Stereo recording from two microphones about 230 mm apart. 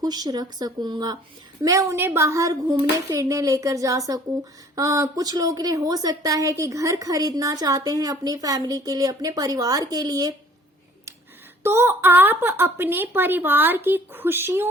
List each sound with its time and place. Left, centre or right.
0.0 s a woman's voice: centre
11.6 s a woman's voice: centre